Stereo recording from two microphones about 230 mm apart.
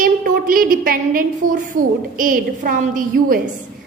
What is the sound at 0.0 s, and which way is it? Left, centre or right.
A woman's voice, right.